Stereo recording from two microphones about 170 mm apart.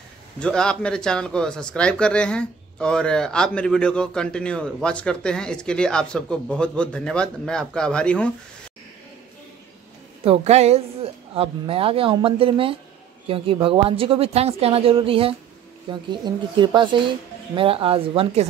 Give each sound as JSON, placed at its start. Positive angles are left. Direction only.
{"t": 0.4, "sound": "speech", "side_deg": 5}
{"t": 10.2, "sound": "a woman's voice", "side_deg": -35}